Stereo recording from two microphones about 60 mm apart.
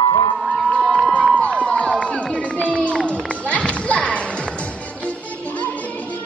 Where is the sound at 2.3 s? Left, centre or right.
Left.